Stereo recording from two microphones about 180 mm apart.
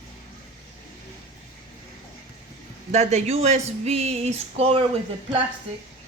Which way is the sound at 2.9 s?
40° right (ahead or behind).